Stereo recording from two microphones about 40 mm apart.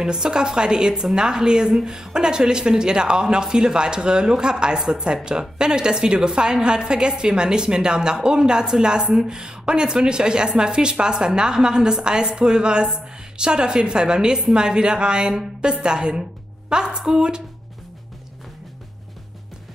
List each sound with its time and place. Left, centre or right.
0.0 s a woman's voice: centre